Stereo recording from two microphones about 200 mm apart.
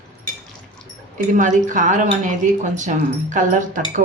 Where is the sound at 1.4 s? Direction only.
40° right (ahead or behind).